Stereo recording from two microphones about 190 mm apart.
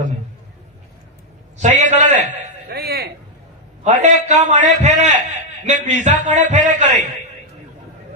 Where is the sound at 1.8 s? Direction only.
40° right (ahead or behind).